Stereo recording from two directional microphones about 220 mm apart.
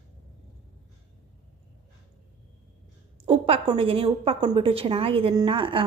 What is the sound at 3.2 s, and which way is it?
A woman's voice, 25° right (ahead or behind).